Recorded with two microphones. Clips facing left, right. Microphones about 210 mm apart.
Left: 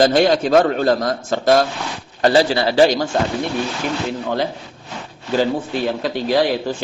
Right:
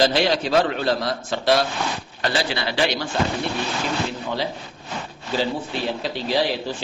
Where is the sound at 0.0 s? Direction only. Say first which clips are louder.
Left 5 dB; 50° left (ahead or behind).